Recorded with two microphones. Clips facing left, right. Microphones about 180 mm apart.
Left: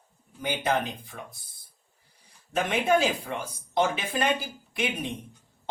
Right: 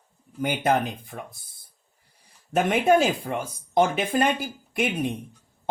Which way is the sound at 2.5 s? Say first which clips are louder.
Right 4 dB; 50° right (ahead or behind).